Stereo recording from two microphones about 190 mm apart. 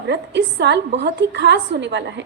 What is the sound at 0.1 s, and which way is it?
A woman's voice, 65° right (ahead or behind).